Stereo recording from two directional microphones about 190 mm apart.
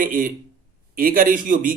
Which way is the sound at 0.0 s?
45° right (ahead or behind).